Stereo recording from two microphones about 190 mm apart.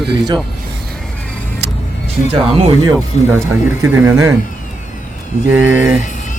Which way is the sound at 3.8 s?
10° right (ahead or behind).